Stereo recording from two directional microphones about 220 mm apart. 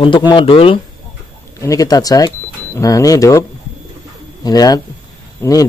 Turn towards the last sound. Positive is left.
turn(degrees=15)  # may be behind; listen again after turning